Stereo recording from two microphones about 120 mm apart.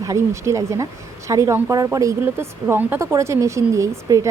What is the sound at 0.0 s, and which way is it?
Speech, 25° right (ahead or behind).